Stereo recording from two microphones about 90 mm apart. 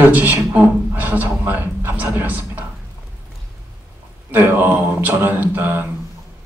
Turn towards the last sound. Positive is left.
turn(degrees=-25)  # may be behind; listen again after turning